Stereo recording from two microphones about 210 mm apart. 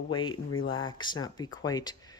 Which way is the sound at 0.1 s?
25° left (ahead or behind).